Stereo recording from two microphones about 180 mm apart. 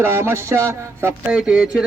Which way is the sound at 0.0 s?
15° right (ahead or behind).